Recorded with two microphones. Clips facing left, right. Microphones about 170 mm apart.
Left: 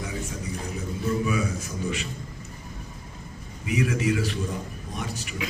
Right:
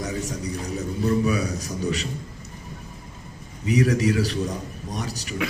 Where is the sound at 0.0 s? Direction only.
40° right (ahead or behind).